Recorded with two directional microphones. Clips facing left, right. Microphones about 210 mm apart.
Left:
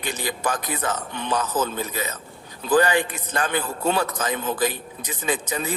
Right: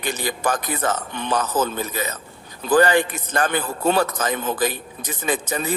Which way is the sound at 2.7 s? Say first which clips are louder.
Right 3 dB; 45° right (ahead or behind).